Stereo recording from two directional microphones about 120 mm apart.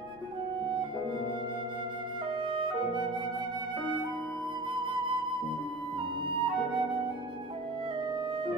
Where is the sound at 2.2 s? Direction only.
40° right (ahead or behind).